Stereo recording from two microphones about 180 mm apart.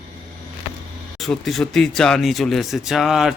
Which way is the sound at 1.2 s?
Centre (ahead or behind).